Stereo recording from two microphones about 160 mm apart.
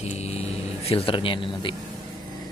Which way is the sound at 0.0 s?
40° left (ahead or behind).